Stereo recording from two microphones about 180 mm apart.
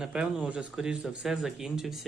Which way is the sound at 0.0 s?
5° right (ahead or behind).